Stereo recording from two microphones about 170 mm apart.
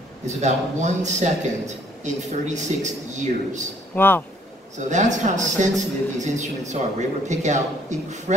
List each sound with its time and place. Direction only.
0.3 s a man's voice: 45° right (ahead or behind)
3.9 s speech: 10° left (ahead or behind)
4.7 s a man's voice: 45° right (ahead or behind)